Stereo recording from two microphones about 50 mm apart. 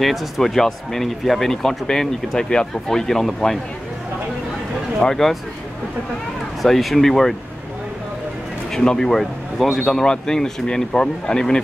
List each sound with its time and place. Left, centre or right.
0.0 s speech: centre
5.0 s speech: centre
6.6 s speech: centre
8.7 s speech: centre
9.8 s speech: centre